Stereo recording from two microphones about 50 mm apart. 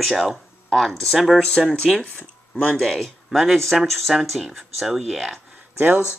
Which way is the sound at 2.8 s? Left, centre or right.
Centre.